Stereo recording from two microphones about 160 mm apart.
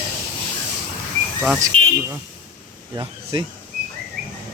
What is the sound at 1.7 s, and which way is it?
Buzzer, 35° right (ahead or behind).